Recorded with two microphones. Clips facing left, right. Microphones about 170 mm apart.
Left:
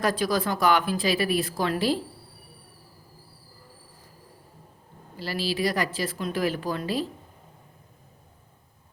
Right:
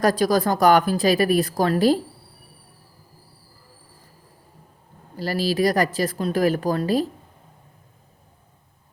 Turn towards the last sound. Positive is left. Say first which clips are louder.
# right 7 dB
turn(degrees=-40)  # may be behind; listen again after turning